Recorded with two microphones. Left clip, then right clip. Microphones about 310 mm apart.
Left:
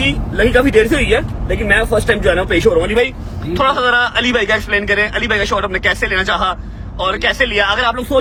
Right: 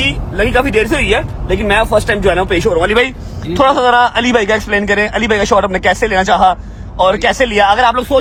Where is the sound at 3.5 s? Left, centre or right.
Right.